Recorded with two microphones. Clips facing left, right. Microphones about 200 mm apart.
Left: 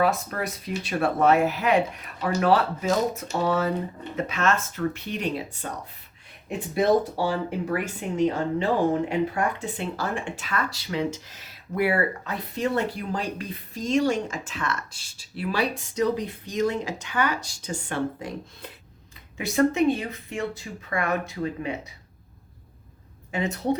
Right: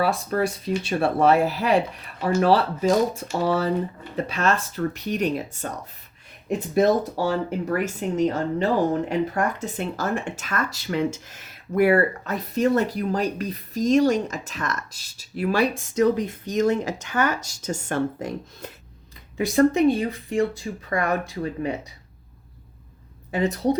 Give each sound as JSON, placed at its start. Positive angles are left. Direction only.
{"t": 0.0, "sound": "speech", "side_deg": -30}
{"t": 19.5, "sound": "speech", "side_deg": -35}
{"t": 23.3, "sound": "speech", "side_deg": -35}